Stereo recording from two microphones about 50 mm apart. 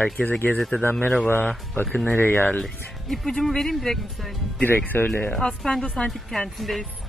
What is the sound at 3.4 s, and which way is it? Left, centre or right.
Speech, centre.